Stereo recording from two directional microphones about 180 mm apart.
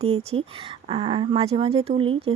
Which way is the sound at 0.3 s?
30° right (ahead or behind).